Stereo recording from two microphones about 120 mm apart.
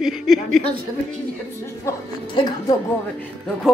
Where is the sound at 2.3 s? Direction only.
40° left (ahead or behind).